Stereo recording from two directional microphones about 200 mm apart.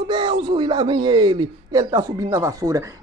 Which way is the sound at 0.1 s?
20° right (ahead or behind).